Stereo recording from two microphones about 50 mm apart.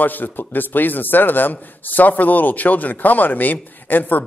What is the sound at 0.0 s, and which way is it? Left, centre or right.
A man's voice, left.